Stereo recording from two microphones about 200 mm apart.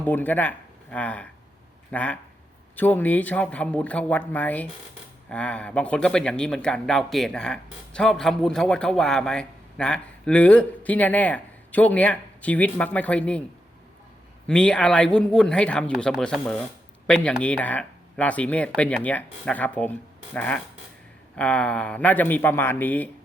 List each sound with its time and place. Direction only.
0.0 s speech: 10° left (ahead or behind)
14.4 s speech: 5° left (ahead or behind)